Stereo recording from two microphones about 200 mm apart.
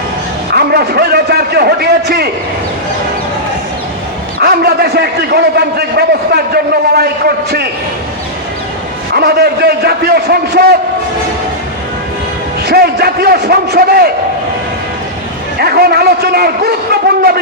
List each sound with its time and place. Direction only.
0.5 s a sound: 50° right (ahead or behind)
4.4 s a man's voice: 50° right (ahead or behind)
9.1 s a man's voice: 50° right (ahead or behind)
12.6 s a man's voice: 50° right (ahead or behind)
15.6 s a man's voice: 50° right (ahead or behind)